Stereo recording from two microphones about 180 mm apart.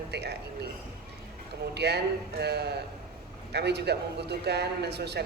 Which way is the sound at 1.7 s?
65° right (ahead or behind).